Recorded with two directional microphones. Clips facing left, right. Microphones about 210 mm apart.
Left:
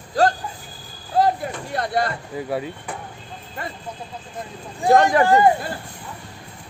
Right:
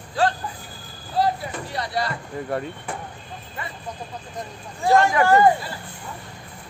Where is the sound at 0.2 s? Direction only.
40° left (ahead or behind).